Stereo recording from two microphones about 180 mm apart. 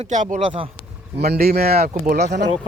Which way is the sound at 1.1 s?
60° right (ahead or behind).